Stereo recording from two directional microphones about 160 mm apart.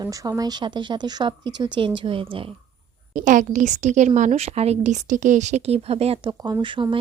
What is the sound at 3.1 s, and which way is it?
A woman's voice, 55° right (ahead or behind).